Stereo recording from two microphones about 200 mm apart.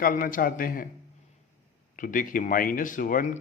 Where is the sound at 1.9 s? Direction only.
40° left (ahead or behind).